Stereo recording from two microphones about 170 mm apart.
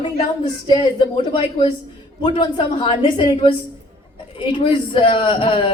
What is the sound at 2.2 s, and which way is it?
A woman's voice, 30° left (ahead or behind).